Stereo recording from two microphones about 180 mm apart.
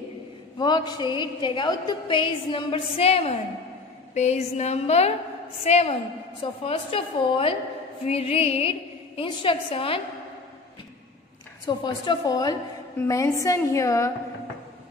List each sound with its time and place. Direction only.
0.6 s a woman's voice: 25° left (ahead or behind)
11.6 s a woman's voice: 25° left (ahead or behind)